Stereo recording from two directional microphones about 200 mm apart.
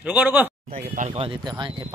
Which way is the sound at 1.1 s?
25° right (ahead or behind).